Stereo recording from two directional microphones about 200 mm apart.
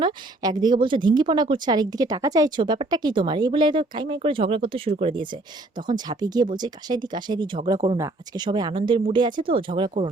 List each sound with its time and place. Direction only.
0.0 s a woman's voice: 20° right (ahead or behind)